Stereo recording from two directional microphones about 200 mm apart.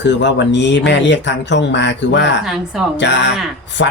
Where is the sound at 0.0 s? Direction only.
60° left (ahead or behind).